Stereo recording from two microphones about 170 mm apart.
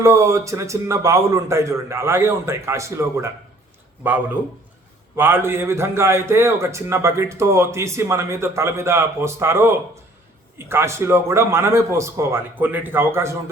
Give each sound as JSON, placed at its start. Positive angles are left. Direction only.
{"t": 0.0, "sound": "a man's voice", "side_deg": -15}